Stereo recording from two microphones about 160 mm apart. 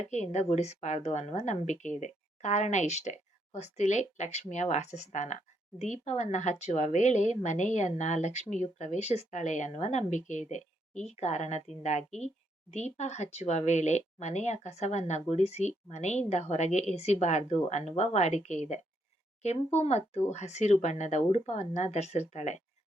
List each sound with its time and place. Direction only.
0.0 s a woman's voice: 45° left (ahead or behind)